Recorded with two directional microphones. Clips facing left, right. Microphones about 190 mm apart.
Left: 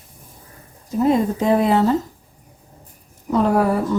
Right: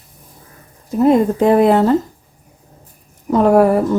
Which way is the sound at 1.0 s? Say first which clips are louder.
Right 5 dB; 60° right (ahead or behind).